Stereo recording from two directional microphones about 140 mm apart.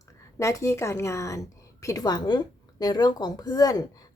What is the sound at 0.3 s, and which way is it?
Speech, 20° left (ahead or behind).